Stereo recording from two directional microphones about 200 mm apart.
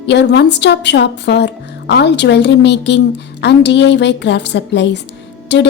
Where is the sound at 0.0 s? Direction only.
60° left (ahead or behind).